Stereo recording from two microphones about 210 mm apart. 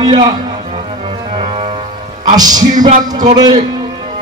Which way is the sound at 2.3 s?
20° right (ahead or behind).